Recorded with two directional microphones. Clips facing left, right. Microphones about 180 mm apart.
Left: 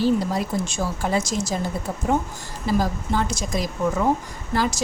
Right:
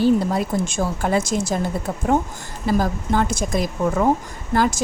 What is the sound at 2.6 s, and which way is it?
Speech, 55° right (ahead or behind).